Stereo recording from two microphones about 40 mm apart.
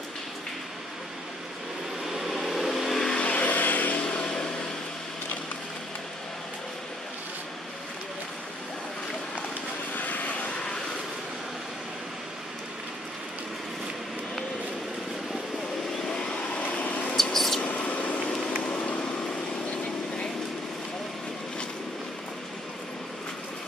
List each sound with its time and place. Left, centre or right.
2.0 s vehicle: centre
3.1 s vehicle: left
3.9 s a sound: left
9.9 s vehicle: left
16.1 s vehicle: left
16.4 s vehicle: left
17.2 s a sound: centre
17.6 s mouse: left
18.3 s a sound: centre
18.7 s vehicle: left